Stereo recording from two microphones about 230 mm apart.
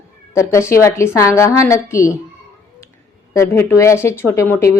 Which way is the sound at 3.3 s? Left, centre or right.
Centre.